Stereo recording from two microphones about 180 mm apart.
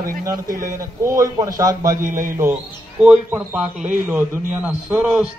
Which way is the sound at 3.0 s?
10° right (ahead or behind).